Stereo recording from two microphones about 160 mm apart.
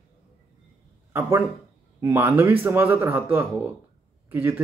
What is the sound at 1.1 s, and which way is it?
Speech, 15° right (ahead or behind).